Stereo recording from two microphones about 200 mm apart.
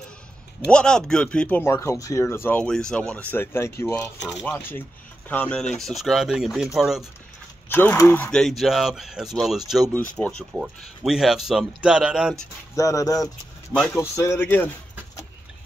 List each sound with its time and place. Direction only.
0.7 s speech: 5° left (ahead or behind)
7.7 s speech: 10° left (ahead or behind)
12.7 s speech: 15° left (ahead or behind)